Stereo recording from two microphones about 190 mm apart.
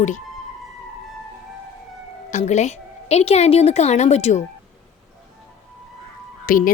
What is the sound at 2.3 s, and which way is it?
A woman's voice, 35° left (ahead or behind).